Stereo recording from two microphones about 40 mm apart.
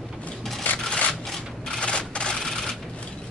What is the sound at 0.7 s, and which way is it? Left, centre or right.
Rub, left.